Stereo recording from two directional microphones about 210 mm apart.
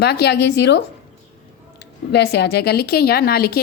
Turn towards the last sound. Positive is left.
turn(degrees=45)  # may be behind; listen again after turning